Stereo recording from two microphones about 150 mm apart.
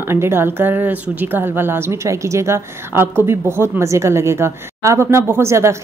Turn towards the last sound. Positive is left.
turn(degrees=-20)  # may be behind; listen again after turning